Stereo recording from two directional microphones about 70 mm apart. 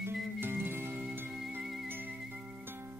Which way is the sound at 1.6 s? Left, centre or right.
Centre.